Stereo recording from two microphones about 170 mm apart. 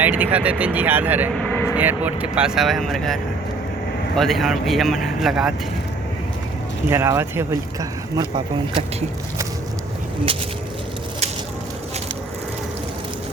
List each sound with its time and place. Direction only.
0.0 s speech: 10° right (ahead or behind)
1.4 s vehicle: 10° left (ahead or behind)
1.7 s speech: 10° right (ahead or behind)
6.9 s speech: 15° right (ahead or behind)